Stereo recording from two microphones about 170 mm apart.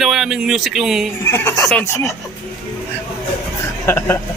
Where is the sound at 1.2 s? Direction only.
15° left (ahead or behind).